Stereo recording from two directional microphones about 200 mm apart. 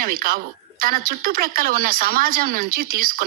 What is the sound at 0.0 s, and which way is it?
A woman's voice, 45° right (ahead or behind).